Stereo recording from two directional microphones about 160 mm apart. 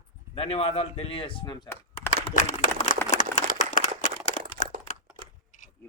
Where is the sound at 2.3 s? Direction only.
50° left (ahead or behind).